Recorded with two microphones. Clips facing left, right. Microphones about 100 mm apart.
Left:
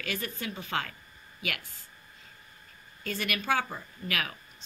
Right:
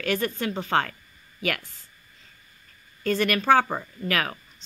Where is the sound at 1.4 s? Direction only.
45° right (ahead or behind).